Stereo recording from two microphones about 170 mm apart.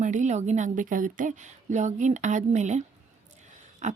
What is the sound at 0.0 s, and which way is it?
Speech, 45° right (ahead or behind).